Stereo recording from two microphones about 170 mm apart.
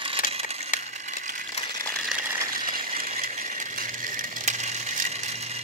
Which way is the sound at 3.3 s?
45° right (ahead or behind).